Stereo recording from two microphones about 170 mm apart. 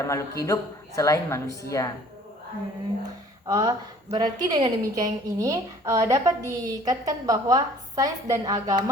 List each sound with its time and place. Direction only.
0.0 s a woman's voice: 15° left (ahead or behind)
3.4 s a woman's voice: 25° right (ahead or behind)